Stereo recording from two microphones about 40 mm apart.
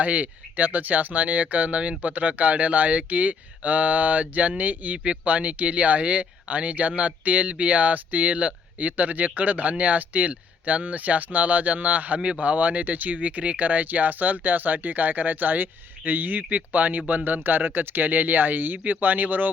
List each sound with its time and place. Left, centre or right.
0.0 s speech: right